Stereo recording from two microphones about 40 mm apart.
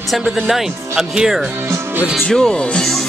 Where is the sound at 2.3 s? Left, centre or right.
Centre.